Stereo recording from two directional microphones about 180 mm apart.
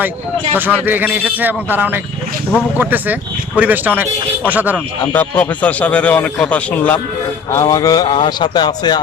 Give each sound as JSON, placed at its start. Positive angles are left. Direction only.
{"t": 0.5, "sound": "a man's voice", "side_deg": -10}
{"t": 5.1, "sound": "speech", "side_deg": 10}
{"t": 7.5, "sound": "a man's voice", "side_deg": 20}